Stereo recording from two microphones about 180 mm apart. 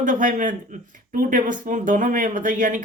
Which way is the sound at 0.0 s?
45° right (ahead or behind).